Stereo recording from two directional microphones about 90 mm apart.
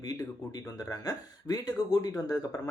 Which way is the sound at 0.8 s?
40° left (ahead or behind).